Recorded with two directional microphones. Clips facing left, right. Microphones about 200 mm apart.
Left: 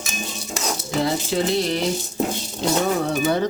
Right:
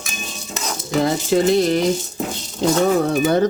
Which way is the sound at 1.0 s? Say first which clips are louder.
Right 6 dB; 45° right (ahead or behind).